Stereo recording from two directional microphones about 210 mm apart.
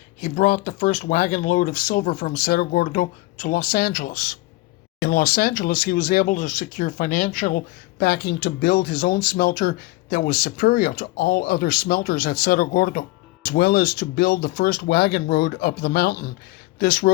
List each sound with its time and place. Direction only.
0.2 s speech: 40° left (ahead or behind)